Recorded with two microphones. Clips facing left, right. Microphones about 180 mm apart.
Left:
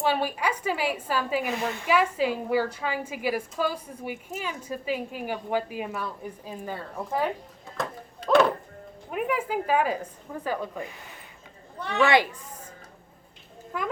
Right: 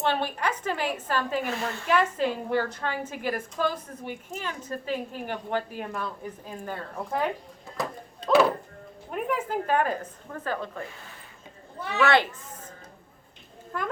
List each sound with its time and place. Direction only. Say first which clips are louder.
0.0 s a woman's voice: left 1 dB; 10° left (ahead or behind)
8.3 s music: even; 5° right (ahead or behind)
9.0 s a woman's voice: left 1 dB; 5° left (ahead or behind)
11.8 s speech: left 2 dB; 5° right (ahead or behind)
12.0 s a woman's voice: left 1 dB; 15° left (ahead or behind)
13.7 s speech: left 1 dB; 5° left (ahead or behind)